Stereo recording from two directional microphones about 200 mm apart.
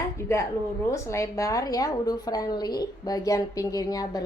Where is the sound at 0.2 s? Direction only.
15° left (ahead or behind).